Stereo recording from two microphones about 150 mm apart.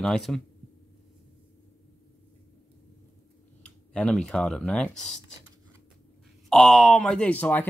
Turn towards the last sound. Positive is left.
turn(degrees=10)  # may be behind; listen again after turning